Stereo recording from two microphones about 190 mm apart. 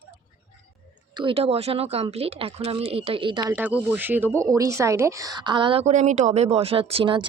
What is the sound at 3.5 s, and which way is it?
Speech, 10° right (ahead or behind).